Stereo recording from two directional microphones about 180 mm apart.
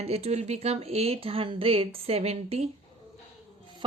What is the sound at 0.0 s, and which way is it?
Speech, 35° right (ahead or behind).